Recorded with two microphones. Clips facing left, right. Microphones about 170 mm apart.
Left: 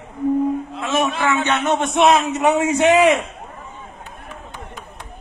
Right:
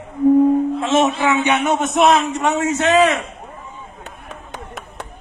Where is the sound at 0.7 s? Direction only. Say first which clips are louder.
Right 4 dB; 25° right (ahead or behind); by 2.1 s centre (ahead or behind).